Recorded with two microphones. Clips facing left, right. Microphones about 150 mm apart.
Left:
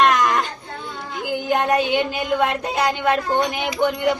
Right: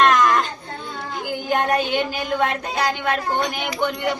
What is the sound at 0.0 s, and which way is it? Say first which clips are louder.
Baby cry: right 1 dB; 15° left (ahead or behind).